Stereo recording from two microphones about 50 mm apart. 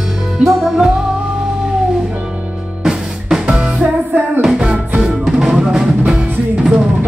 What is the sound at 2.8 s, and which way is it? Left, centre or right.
Music, centre.